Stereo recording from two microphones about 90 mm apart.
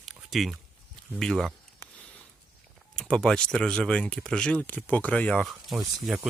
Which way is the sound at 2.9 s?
5° left (ahead or behind).